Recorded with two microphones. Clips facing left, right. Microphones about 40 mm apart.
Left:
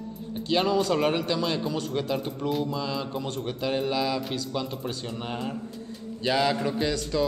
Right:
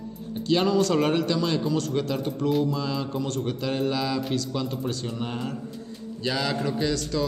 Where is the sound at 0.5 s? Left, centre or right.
Centre.